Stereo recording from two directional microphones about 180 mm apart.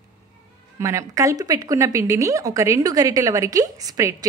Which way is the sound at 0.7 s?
15° right (ahead or behind).